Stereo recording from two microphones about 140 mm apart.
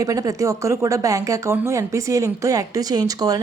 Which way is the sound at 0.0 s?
25° right (ahead or behind).